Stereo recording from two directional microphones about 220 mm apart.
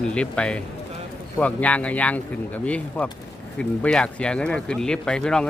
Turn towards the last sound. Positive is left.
turn(degrees=5)  # may be behind; listen again after turning